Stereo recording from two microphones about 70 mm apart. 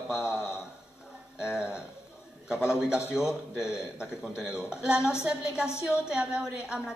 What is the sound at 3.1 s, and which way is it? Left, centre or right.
A man's voice, centre.